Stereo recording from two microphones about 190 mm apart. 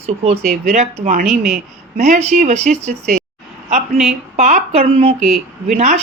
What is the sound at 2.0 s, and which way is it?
Speech, 35° right (ahead or behind).